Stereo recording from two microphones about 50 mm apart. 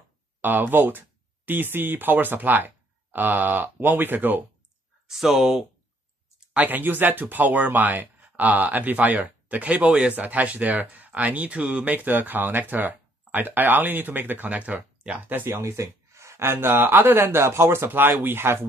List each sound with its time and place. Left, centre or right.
0.4 s speech: right
5.0 s speech: centre
6.5 s speech: right
9.8 s speech: right
10.1 s speech: right
15.6 s speech: right